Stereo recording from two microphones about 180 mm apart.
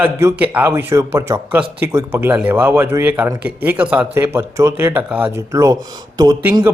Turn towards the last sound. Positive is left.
turn(degrees=-15)  # may be behind; listen again after turning